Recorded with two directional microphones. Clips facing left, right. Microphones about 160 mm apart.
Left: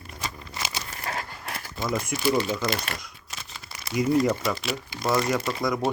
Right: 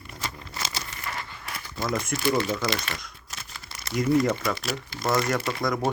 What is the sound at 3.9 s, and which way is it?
Speech, 10° left (ahead or behind).